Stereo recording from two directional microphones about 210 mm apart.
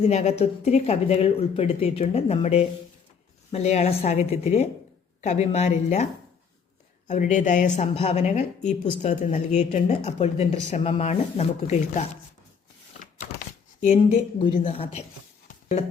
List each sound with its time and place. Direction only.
0.0 s speech: 30° left (ahead or behind)
7.1 s speech: 35° left (ahead or behind)
13.8 s speech: 30° left (ahead or behind)